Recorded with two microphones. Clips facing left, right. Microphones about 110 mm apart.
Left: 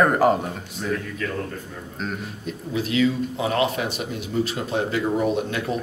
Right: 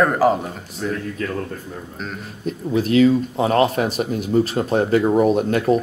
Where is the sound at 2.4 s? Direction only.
45° right (ahead or behind).